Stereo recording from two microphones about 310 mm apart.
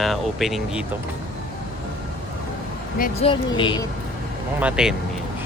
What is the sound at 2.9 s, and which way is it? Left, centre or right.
Speech, left.